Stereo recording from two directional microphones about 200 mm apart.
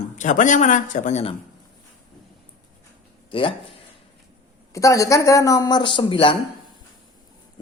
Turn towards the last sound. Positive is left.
turn(degrees=25)  # may be behind; listen again after turning